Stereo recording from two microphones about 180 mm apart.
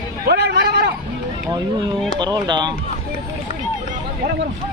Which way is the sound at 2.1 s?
25° right (ahead or behind).